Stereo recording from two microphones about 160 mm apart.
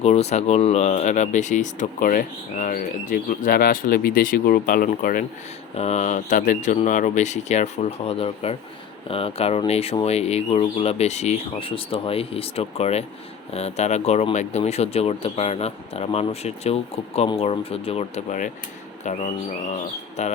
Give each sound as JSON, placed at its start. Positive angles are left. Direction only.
{"t": 0.0, "sound": "speech", "side_deg": 45}
{"t": 5.7, "sound": "speech", "side_deg": 40}
{"t": 20.2, "sound": "speech", "side_deg": 45}